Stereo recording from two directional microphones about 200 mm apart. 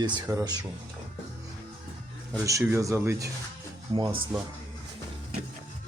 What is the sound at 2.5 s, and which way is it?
Speech, 15° right (ahead or behind).